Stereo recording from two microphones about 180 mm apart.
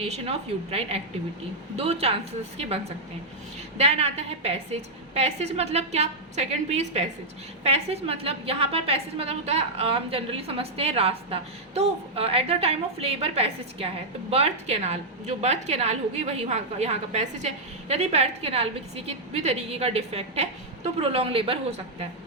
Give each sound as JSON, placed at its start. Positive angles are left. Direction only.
{"t": 0.0, "sound": "a woman's voice", "side_deg": -35}